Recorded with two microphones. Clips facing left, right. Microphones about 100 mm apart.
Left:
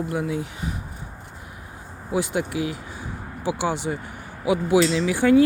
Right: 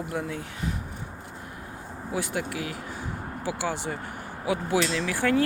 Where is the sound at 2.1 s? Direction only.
20° left (ahead or behind).